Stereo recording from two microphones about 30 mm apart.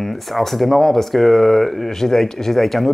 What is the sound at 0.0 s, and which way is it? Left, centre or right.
Speech, centre.